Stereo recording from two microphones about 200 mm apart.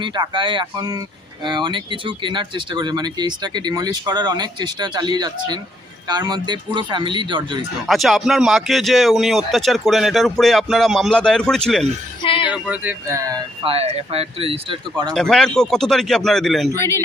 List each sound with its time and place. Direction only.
0.0 s speech: 25° right (ahead or behind)
7.9 s speech: centre (ahead or behind)
12.2 s music: 25° left (ahead or behind)
12.5 s speech: 5° right (ahead or behind)
13.7 s speech: 30° right (ahead or behind)
15.1 s speech: centre (ahead or behind)